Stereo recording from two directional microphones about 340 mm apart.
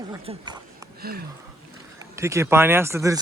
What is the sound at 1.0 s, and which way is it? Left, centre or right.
Speech, right.